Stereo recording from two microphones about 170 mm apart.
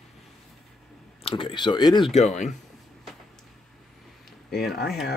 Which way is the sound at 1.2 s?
30° left (ahead or behind).